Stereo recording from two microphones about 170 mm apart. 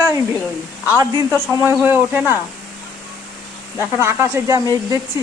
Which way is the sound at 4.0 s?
15° right (ahead or behind).